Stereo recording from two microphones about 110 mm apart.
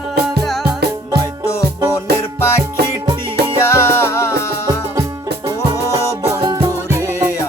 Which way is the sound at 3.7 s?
25° left (ahead or behind).